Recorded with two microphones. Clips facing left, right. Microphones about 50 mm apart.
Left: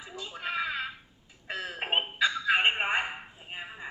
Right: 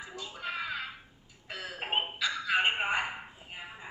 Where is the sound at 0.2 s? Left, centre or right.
Left.